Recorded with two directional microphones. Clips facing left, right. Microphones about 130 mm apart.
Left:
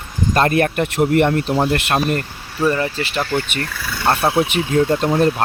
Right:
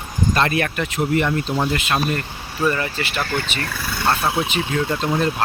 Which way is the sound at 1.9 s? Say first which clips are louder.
Left 3 dB; 45° left (ahead or behind).